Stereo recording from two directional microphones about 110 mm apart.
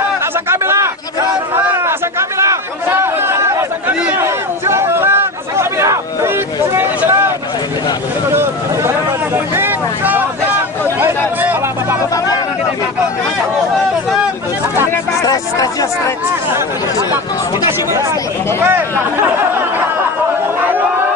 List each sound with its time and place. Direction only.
0.5 s chatter: 25° right (ahead or behind)
8.4 s a sound: 20° right (ahead or behind)
15.2 s speech: 35° left (ahead or behind)